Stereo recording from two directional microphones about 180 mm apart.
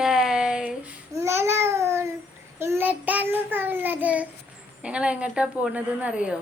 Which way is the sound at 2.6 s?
10° right (ahead or behind).